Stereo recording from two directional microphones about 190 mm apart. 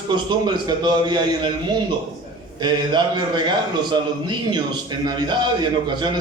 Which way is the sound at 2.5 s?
25° right (ahead or behind).